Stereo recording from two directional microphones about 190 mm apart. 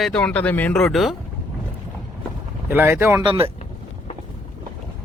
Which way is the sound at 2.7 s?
10° right (ahead or behind).